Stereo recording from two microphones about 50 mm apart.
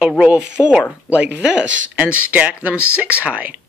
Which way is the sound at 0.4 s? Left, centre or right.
Centre.